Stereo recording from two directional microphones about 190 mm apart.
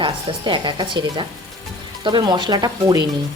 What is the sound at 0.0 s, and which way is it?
A woman's voice, 25° right (ahead or behind).